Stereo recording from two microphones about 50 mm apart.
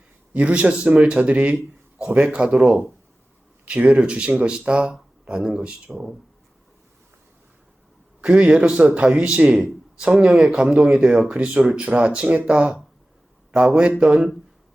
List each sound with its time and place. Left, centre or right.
0.3 s a man's voice: right
2.4 s speech: centre
3.7 s a man's voice: right
8.2 s a man's voice: right
9.6 s speech: centre
11.3 s a man's voice: right; by 12.8 s centre
13.7 s a man's voice: centre